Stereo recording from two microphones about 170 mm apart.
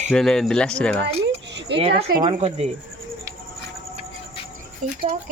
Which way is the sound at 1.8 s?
65° right (ahead or behind).